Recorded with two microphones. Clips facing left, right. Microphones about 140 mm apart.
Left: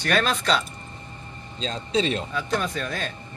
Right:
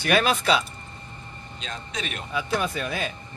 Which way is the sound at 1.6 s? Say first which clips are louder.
Left 10 dB; 30° left (ahead or behind).